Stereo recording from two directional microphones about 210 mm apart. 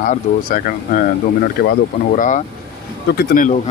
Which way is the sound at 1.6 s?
50° left (ahead or behind).